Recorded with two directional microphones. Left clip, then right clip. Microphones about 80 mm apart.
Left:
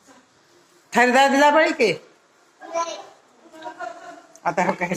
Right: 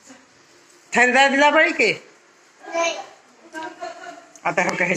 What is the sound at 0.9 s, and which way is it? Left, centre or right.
Speech, left.